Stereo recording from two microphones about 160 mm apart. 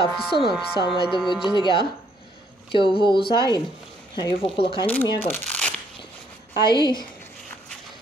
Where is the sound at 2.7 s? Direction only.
30° left (ahead or behind).